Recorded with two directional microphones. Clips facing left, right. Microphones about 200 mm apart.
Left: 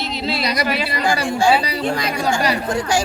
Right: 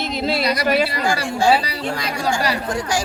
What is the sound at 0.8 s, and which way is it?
Speech, 20° left (ahead or behind).